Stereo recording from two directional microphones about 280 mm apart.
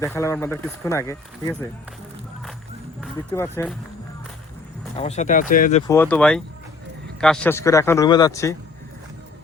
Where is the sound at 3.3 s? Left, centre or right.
Centre.